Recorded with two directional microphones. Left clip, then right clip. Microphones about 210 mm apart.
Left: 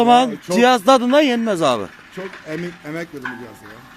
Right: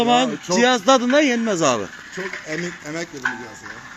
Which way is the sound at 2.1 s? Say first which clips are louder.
Right 2 dB; 50° left (ahead or behind).